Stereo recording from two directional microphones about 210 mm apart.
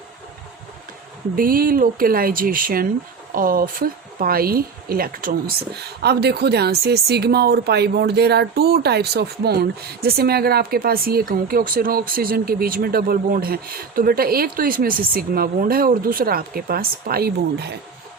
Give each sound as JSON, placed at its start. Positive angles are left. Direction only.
{"t": 1.4, "sound": "speech", "side_deg": -45}